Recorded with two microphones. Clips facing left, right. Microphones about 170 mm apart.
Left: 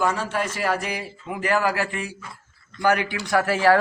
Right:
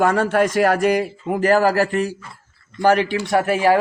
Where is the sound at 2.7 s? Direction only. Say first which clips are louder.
Right 5 dB; 30° right (ahead or behind).